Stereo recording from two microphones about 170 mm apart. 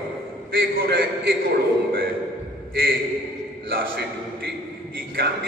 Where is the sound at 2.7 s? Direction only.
65° right (ahead or behind).